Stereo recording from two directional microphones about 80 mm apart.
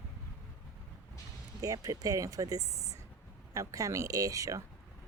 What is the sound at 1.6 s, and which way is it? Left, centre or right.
Speech, right.